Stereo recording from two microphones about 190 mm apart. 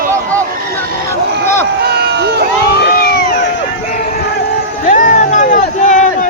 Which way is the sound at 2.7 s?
55° left (ahead or behind).